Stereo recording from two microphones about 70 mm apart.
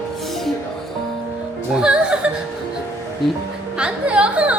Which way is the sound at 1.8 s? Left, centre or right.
Centre.